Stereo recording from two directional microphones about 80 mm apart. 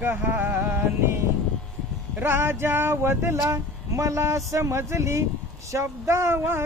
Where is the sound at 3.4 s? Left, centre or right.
Right.